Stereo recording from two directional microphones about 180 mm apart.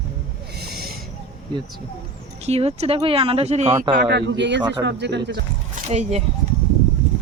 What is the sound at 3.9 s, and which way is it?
A man's voice, 65° right (ahead or behind).